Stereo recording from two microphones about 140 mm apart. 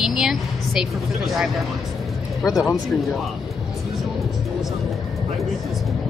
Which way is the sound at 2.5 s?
25° left (ahead or behind).